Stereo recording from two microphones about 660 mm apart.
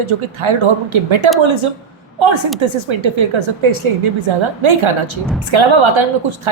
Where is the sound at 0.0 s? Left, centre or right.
Right.